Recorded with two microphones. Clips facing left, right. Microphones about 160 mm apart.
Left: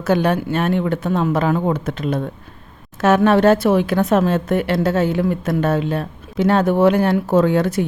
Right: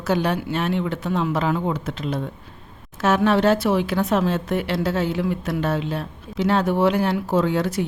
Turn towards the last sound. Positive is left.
turn(degrees=55)  # may be behind; listen again after turning